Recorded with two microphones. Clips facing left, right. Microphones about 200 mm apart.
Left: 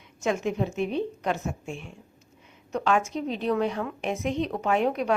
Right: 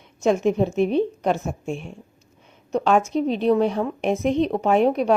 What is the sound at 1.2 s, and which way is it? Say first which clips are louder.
Speech: right 6 dB; 40° right (ahead or behind).